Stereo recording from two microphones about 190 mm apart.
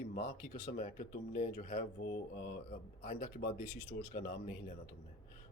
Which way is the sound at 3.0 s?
40° left (ahead or behind).